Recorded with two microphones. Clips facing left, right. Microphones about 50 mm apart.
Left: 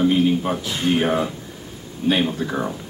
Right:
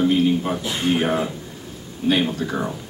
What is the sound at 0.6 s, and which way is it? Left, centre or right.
Speech, centre.